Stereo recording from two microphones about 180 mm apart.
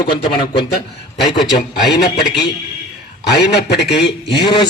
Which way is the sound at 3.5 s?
70° left (ahead or behind).